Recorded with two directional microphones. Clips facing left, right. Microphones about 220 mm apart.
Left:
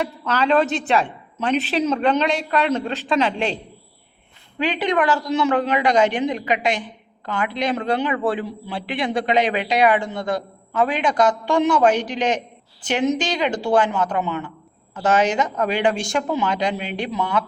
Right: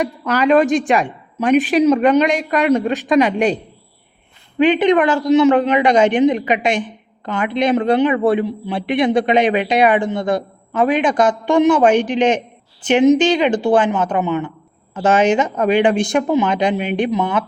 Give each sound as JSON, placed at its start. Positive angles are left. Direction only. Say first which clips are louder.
{"t": 0.0, "sound": "a woman's voice", "louder": "right 5 dB", "side_deg": -10}
{"t": 4.5, "sound": "a man's voice", "louder": "right 8 dB", "side_deg": -20}